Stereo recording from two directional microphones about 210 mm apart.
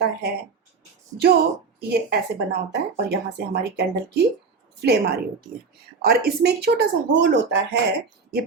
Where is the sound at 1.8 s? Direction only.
50° right (ahead or behind).